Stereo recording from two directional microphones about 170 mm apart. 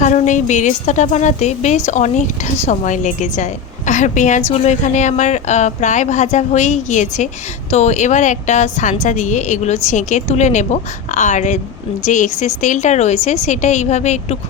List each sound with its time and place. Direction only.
0.0 s a woman's voice: 45° left (ahead or behind)